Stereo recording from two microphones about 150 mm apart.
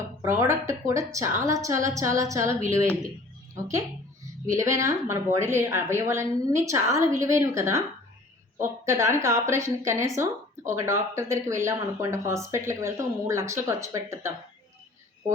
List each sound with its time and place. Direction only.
0.2 s speech: 20° right (ahead or behind)